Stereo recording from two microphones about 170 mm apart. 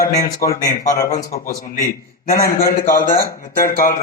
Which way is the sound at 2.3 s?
55° left (ahead or behind).